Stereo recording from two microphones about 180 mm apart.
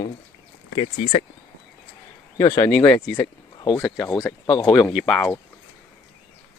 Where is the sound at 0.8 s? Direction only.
35° left (ahead or behind).